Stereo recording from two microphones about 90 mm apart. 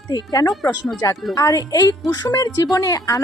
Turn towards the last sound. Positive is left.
turn(degrees=40)  # may be behind; listen again after turning